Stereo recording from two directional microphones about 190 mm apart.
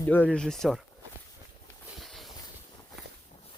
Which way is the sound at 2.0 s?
Centre (ahead or behind).